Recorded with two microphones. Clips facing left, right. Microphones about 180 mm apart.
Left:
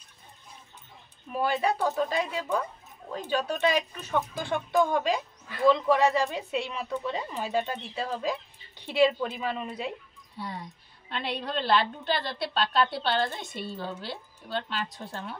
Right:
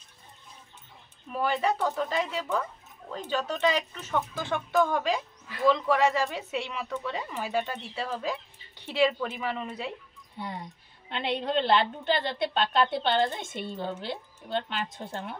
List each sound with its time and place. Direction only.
1.3 s speech: 15° left (ahead or behind)
10.3 s a woman's voice: 20° right (ahead or behind)